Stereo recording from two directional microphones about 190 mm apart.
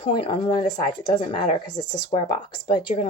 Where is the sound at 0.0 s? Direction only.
25° left (ahead or behind).